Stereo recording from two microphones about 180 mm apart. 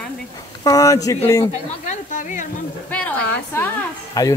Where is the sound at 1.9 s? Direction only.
45° left (ahead or behind).